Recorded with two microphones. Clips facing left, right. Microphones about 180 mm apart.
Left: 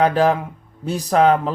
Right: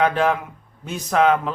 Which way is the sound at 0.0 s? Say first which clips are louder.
Left 3 dB; 35° left (ahead or behind).